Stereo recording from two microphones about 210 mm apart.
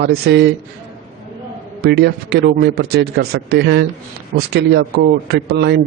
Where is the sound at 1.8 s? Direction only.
50° right (ahead or behind).